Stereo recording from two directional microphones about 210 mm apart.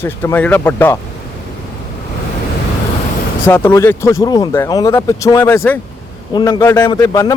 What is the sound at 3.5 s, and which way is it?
Speech, 10° left (ahead or behind).